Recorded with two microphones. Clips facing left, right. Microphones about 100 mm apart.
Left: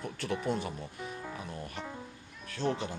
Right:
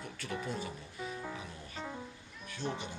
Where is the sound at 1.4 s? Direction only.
55° left (ahead or behind).